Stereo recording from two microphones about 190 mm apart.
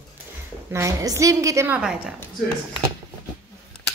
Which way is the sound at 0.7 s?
15° right (ahead or behind).